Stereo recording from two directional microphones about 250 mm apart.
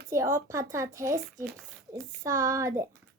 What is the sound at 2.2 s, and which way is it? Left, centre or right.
Speech, centre.